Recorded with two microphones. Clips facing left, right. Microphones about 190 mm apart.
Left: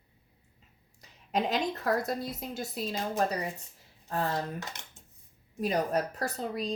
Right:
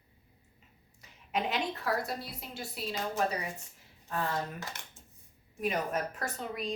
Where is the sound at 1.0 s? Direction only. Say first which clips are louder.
Left 3 dB; 35° left (ahead or behind).